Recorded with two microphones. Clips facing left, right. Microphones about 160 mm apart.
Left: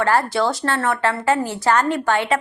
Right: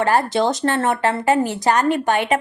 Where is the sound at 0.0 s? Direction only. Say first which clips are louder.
Right 1 dB; 15° right (ahead or behind).